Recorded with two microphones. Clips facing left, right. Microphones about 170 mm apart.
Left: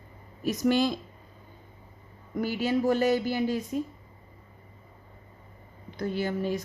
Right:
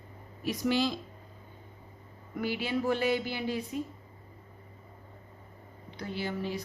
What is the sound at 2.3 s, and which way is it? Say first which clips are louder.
A woman's voice: left 5 dB; 45° left (ahead or behind).